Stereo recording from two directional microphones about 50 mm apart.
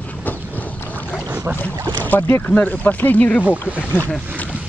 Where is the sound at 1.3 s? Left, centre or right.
Right.